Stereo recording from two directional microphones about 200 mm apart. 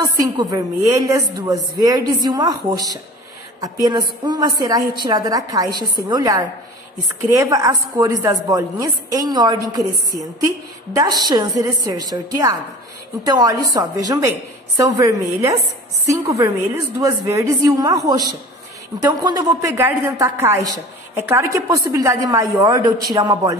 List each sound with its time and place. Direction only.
0.0 s a woman's voice: 20° right (ahead or behind)